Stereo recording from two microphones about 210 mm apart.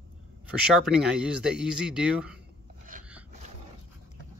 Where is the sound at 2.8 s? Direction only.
40° right (ahead or behind).